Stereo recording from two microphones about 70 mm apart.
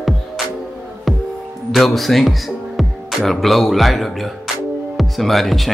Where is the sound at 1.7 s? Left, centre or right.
Centre.